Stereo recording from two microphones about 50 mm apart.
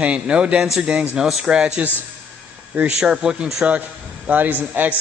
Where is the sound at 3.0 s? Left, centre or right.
Centre.